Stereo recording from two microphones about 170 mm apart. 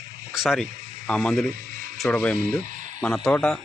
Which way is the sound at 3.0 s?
5° left (ahead or behind).